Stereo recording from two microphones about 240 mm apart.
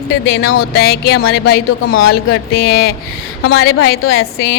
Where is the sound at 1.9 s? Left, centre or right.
Left.